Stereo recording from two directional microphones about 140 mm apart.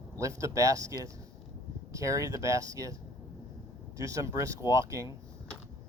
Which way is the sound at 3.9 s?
25° right (ahead or behind).